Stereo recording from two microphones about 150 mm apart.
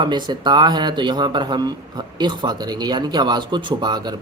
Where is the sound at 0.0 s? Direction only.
30° right (ahead or behind).